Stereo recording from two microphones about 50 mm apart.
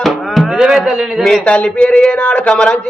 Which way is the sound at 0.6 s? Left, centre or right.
Centre.